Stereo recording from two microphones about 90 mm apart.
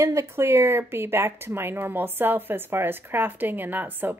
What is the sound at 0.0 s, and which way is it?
Speech, 30° right (ahead or behind).